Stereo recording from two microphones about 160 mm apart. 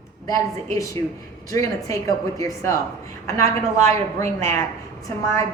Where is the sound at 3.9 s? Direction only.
45° right (ahead or behind).